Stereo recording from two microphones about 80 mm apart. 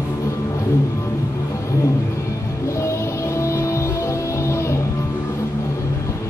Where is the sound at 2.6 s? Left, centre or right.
Left.